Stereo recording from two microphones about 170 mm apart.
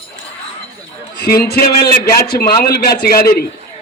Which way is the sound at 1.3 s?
60° left (ahead or behind).